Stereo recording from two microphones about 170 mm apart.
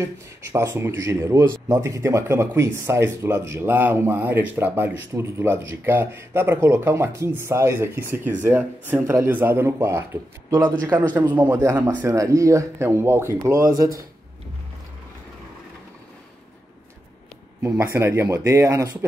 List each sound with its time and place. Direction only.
0.0 s speech: 15° right (ahead or behind)
17.6 s speech: 15° right (ahead or behind)